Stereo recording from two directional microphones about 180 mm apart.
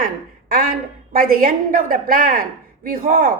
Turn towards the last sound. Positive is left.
turn(degrees=-50)  # may be behind; listen again after turning